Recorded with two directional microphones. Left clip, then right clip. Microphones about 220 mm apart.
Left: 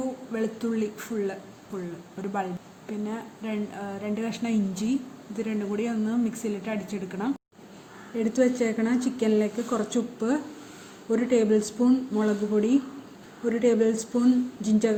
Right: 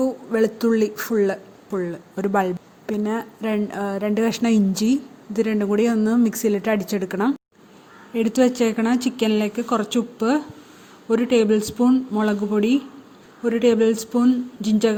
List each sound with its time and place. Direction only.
0.3 s speech: 45° right (ahead or behind)